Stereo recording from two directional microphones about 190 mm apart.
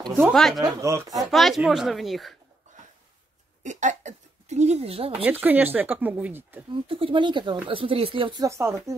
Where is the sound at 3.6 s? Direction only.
40° right (ahead or behind).